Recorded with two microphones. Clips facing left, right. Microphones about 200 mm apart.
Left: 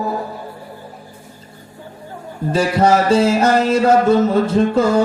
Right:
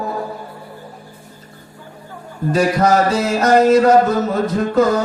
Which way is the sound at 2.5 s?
30° left (ahead or behind).